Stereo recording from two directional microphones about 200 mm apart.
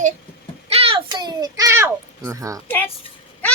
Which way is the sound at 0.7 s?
30° right (ahead or behind).